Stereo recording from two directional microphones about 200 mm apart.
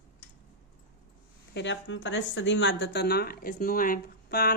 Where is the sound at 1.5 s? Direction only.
60° left (ahead or behind).